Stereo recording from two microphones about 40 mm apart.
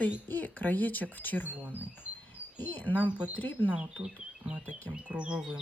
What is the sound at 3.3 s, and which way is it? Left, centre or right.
Speech, left.